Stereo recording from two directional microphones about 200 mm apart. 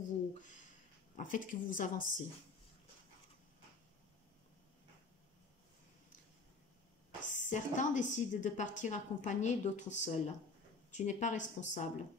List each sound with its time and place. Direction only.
1.1 s a woman's voice: 40° left (ahead or behind)
7.2 s a woman's voice: 40° left (ahead or behind)